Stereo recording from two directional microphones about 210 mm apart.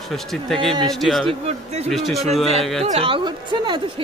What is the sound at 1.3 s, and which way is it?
Speech, 30° right (ahead or behind).